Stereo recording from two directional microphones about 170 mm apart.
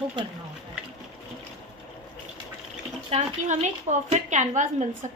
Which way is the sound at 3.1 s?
40° right (ahead or behind).